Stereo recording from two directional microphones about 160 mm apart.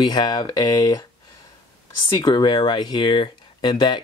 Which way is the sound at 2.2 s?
30° left (ahead or behind).